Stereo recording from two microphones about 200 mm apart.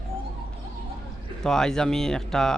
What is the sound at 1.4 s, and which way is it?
A man's voice, 5° left (ahead or behind).